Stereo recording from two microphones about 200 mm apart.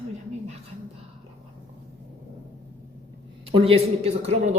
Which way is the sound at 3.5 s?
30° right (ahead or behind).